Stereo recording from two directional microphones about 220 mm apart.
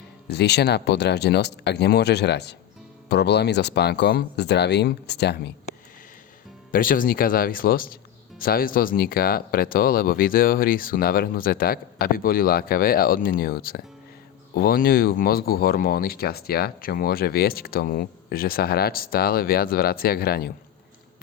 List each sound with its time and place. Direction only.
0.3 s speech: 50° left (ahead or behind)
6.7 s speech: 40° left (ahead or behind)